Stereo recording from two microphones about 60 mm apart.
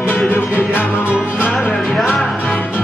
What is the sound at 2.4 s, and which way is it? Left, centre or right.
Music, left.